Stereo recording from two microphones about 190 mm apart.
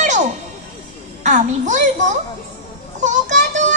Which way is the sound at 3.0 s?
40° right (ahead or behind).